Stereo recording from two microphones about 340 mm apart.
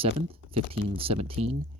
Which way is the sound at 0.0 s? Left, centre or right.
Centre.